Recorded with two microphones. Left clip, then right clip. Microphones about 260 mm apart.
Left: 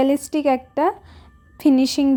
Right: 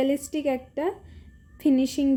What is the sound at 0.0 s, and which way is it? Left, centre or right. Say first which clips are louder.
A woman's voice: left 6 dB; centre.